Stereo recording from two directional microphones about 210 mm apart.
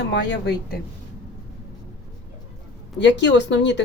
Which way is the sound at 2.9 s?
55° left (ahead or behind).